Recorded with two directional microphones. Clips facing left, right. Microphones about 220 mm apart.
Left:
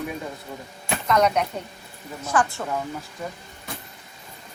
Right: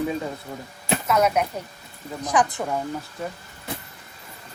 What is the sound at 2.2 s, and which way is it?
Speech, 15° right (ahead or behind).